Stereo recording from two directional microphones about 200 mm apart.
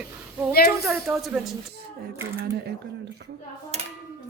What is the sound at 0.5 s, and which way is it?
Speech, 50° left (ahead or behind).